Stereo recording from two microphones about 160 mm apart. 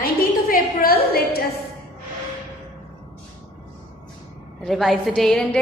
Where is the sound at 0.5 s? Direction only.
70° left (ahead or behind).